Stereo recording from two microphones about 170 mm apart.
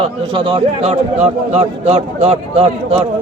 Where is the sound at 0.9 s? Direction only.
40° right (ahead or behind).